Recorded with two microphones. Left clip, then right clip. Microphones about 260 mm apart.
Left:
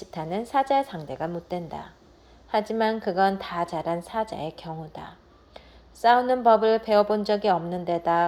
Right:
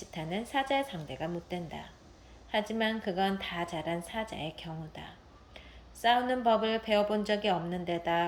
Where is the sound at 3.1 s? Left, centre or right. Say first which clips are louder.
Left 8 dB; left.